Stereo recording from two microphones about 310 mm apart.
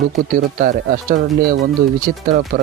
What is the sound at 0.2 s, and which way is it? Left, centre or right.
Speech, right.